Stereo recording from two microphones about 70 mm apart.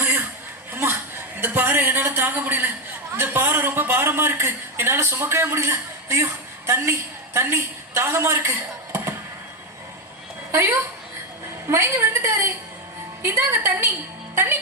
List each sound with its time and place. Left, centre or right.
0.0 s a sound: right
1.4 s a man's voice: right
10.5 s a man's voice: right